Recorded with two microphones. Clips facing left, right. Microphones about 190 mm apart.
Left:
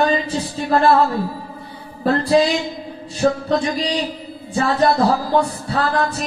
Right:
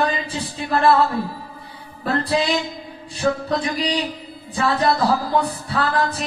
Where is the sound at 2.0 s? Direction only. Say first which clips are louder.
Left 6 dB; 35° left (ahead or behind).